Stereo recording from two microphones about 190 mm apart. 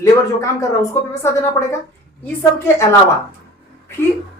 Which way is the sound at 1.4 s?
15° left (ahead or behind).